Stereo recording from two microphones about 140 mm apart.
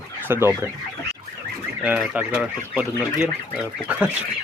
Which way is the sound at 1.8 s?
10° right (ahead or behind).